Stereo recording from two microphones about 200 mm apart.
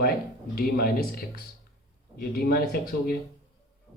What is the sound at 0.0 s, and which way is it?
Speech, 50° left (ahead or behind).